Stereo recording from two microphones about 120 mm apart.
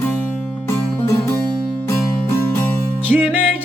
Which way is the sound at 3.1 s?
15° right (ahead or behind).